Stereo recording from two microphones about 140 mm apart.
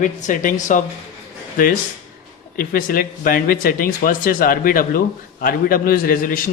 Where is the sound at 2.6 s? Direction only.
90° left.